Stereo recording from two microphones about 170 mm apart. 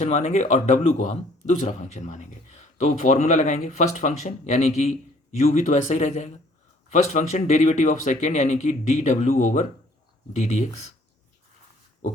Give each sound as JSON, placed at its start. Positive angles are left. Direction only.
{"t": 0.0, "sound": "speech", "side_deg": 40}